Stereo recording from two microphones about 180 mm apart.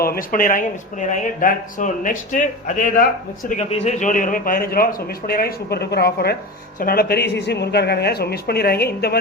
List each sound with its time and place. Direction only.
0.0 s speech: 55° left (ahead or behind)
3.6 s a man's voice: 40° left (ahead or behind); by 9.1 s 60° left (ahead or behind)